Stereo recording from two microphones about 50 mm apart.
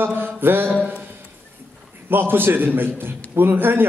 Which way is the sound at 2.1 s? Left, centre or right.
Right.